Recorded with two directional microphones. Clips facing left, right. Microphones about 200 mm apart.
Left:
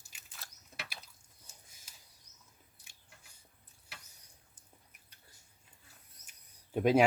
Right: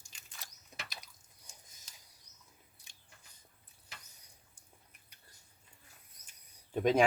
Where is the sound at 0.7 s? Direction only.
15° right (ahead or behind).